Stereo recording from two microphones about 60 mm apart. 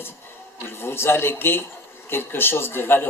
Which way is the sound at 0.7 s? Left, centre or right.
Left.